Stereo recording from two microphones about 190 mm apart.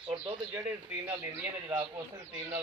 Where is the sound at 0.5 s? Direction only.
10° right (ahead or behind).